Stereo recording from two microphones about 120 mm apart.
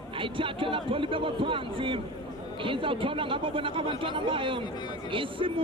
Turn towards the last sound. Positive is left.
turn(degrees=-45)  # may be behind; listen again after turning